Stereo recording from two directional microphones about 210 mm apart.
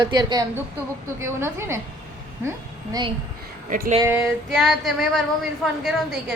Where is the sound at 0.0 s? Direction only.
20° right (ahead or behind).